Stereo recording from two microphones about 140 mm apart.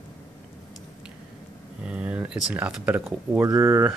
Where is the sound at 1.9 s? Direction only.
10° right (ahead or behind).